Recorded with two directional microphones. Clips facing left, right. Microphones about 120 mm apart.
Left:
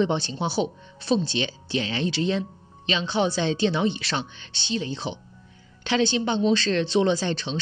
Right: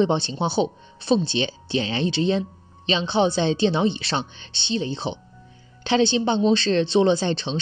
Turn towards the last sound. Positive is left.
turn(degrees=-25)  # may be behind; listen again after turning